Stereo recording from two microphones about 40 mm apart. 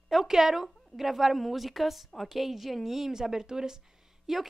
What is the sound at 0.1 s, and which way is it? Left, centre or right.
A woman's voice, centre.